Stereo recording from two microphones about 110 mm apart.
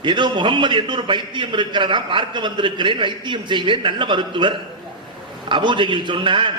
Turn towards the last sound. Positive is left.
turn(degrees=-50)  # may be behind; listen again after turning